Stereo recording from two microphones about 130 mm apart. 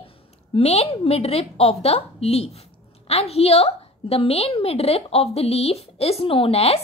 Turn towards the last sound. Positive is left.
turn(degrees=50)  # may be behind; listen again after turning